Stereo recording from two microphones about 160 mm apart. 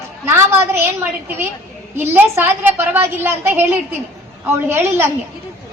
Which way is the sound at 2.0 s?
15° right (ahead or behind).